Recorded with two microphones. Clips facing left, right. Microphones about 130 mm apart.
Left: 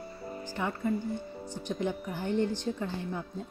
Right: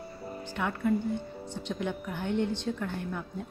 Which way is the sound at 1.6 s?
65° right (ahead or behind).